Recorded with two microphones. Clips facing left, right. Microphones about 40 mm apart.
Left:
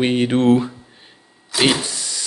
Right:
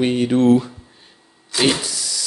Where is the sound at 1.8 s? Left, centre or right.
Left.